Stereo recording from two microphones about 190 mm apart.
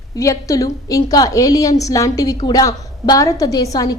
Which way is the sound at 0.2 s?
15° left (ahead or behind).